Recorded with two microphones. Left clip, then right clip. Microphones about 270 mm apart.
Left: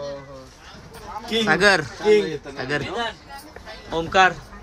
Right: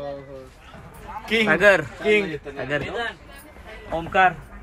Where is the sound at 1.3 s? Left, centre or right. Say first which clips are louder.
Right 1 dB; centre.